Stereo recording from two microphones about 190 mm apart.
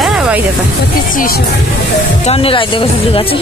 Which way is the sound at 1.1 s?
50° left (ahead or behind).